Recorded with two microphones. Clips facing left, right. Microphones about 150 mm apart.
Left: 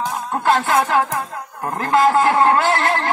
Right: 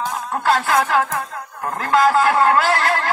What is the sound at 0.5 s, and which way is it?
A man's voice, 25° left (ahead or behind).